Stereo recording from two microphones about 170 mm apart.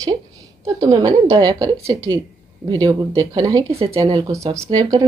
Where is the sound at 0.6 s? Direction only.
20° right (ahead or behind).